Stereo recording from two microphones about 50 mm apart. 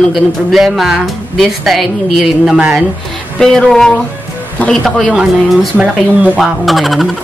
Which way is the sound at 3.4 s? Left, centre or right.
Centre.